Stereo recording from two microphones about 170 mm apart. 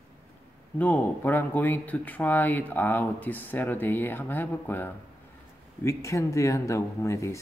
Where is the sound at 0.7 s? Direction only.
10° left (ahead or behind).